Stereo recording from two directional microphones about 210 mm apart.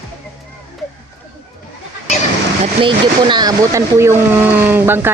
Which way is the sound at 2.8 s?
20° right (ahead or behind).